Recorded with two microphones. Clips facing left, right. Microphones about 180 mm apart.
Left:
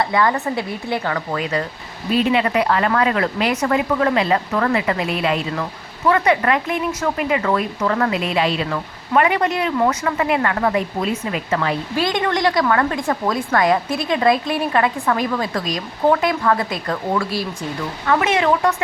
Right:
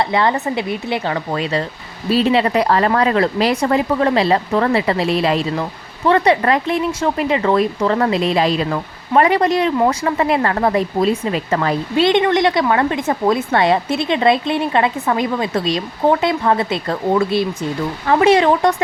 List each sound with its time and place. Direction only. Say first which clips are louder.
0.0 s speech: right 2 dB; 25° right (ahead or behind)
11.9 s speech: right 7 dB; 25° right (ahead or behind)